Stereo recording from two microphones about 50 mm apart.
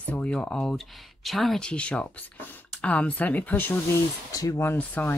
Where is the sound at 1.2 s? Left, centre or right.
Centre.